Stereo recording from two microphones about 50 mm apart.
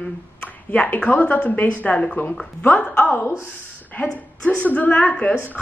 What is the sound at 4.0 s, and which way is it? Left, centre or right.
Speech, left.